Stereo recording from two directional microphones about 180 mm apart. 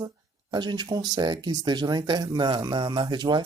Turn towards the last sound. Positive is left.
turn(degrees=-25)  # may be behind; listen again after turning